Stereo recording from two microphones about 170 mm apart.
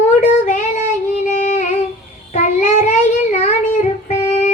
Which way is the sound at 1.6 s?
40° left (ahead or behind).